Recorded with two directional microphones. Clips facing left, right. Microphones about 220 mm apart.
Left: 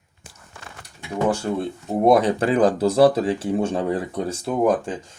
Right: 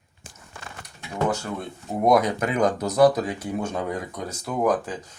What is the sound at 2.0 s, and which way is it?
Speech, 30° left (ahead or behind).